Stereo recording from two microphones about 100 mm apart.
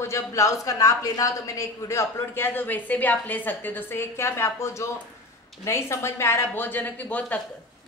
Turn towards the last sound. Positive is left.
turn(degrees=15)  # may be behind; listen again after turning